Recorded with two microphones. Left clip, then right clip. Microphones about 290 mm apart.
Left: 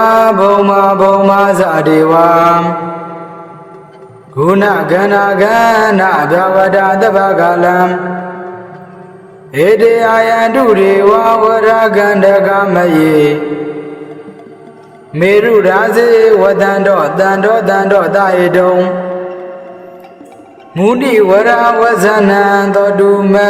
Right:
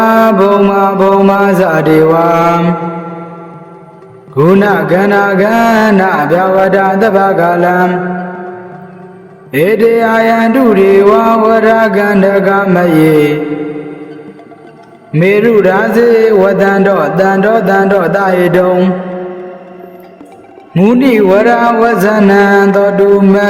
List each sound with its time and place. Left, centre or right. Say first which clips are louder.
0.0 s mantra: even; right
4.4 s mantra: right 1 dB; right
9.5 s mantra: left 1 dB; right
15.1 s mantra: even; right
20.7 s mantra: even; right